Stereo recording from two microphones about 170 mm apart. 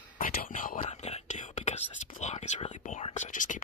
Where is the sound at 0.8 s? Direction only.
40° left (ahead or behind).